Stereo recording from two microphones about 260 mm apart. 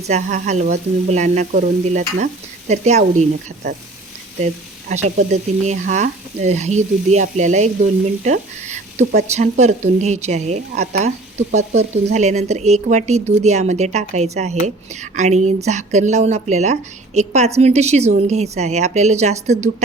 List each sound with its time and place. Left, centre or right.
0.1 s frying: right
4.9 s frying: right